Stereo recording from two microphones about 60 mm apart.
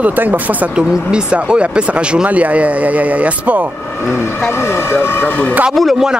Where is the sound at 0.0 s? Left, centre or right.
Right.